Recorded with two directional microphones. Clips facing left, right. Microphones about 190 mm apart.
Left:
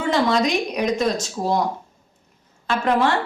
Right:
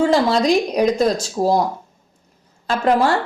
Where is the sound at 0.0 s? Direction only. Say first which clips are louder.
Right 4 dB; 35° right (ahead or behind).